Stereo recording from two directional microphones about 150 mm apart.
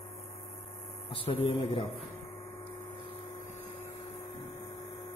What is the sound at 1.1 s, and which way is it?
Mantra, 40° left (ahead or behind).